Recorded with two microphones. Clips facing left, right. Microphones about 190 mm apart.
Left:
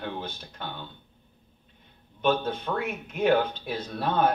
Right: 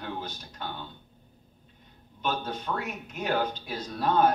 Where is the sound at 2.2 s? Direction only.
55° left (ahead or behind).